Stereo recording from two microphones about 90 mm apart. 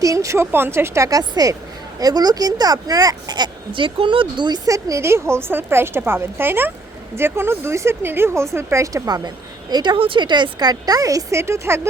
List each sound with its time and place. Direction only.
0.0 s a woman's voice: 40° right (ahead or behind)
9.0 s a woman's voice: 50° right (ahead or behind)
10.0 s a woman's voice: 65° right (ahead or behind); by 11.8 s 30° right (ahead or behind)